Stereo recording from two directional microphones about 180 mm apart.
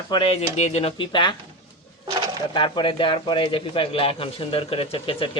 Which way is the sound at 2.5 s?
25° left (ahead or behind).